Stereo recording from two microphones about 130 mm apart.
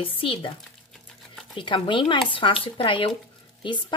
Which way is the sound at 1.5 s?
40° left (ahead or behind).